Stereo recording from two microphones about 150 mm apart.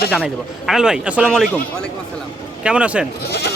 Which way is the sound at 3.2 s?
90° left.